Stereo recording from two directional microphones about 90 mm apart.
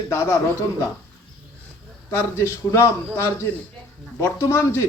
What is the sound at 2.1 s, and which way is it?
A man's voice, 30° left (ahead or behind).